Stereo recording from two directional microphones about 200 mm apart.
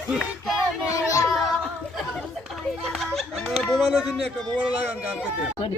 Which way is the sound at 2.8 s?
Centre (ahead or behind).